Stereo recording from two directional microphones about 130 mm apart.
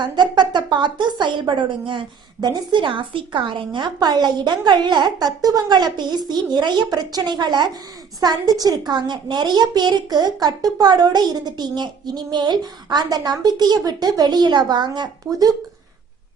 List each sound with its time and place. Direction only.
0.0 s a woman's voice: 35° right (ahead or behind)